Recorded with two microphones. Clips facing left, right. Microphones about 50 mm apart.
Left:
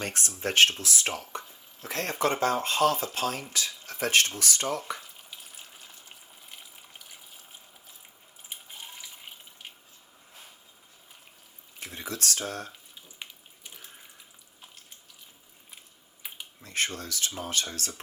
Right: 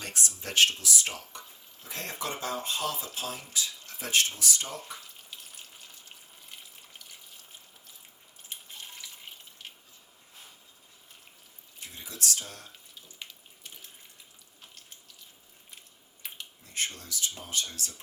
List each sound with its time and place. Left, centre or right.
0.0 s speech: left
1.8 s speech: left
4.9 s water: centre
11.8 s a sound: left
13.2 s water tap: centre
16.2 s computer keyboard: centre
16.6 s speech: left